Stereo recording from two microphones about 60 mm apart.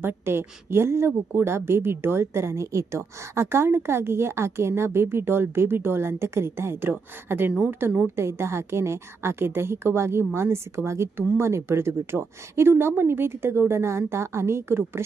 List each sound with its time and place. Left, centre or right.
0.0 s a woman's voice: right
8.2 s a woman's voice: right